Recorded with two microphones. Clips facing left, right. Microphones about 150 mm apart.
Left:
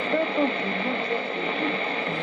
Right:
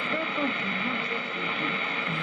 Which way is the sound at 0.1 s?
30° left (ahead or behind).